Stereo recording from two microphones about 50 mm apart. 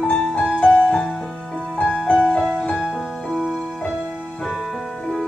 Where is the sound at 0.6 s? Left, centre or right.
Left.